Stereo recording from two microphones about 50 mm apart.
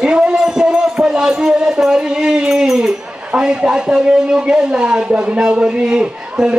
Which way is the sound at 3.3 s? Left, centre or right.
Centre.